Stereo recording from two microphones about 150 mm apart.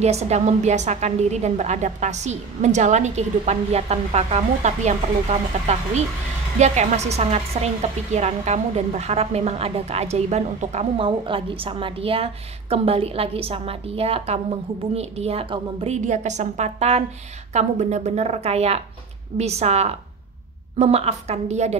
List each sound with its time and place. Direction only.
0.0 s a woman's voice: 45° right (ahead or behind)
6.6 s a woman's voice: 50° right (ahead or behind)